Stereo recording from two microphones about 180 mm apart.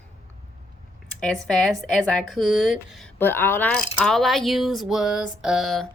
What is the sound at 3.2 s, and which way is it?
Speech, 10° left (ahead or behind).